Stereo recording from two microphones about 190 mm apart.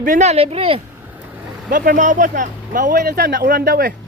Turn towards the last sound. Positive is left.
turn(degrees=-50)  # may be behind; listen again after turning